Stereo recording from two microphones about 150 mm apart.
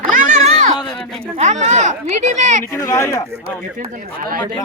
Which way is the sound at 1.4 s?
50° right (ahead or behind).